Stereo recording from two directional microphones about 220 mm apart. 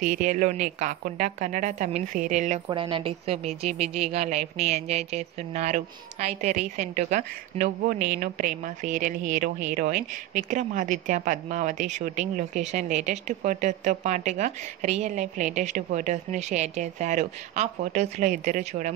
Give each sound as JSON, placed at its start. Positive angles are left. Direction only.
{"t": 0.0, "sound": "speech", "side_deg": -35}
{"t": 2.7, "sound": "a woman's voice", "side_deg": -25}